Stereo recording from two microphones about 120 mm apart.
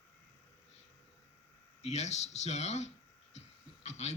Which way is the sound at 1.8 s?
70° left (ahead or behind).